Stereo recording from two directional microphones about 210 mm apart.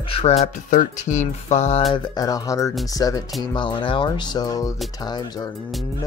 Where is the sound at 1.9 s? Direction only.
15° left (ahead or behind).